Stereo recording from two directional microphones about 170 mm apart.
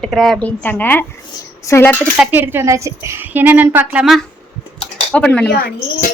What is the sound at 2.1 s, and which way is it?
A woman's voice, 10° right (ahead or behind).